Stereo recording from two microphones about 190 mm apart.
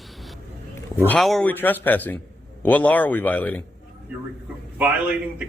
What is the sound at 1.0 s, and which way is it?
A man's voice, 5° left (ahead or behind).